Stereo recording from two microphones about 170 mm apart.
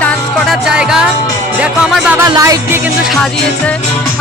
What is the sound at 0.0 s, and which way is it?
Music, centre (ahead or behind).